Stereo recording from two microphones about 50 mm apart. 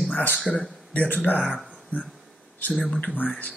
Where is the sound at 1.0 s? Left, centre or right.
Left.